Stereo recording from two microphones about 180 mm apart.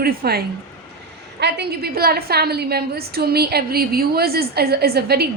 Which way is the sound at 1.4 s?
65° right (ahead or behind).